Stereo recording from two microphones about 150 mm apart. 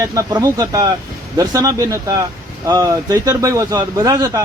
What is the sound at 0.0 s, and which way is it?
A man's voice, 25° right (ahead or behind).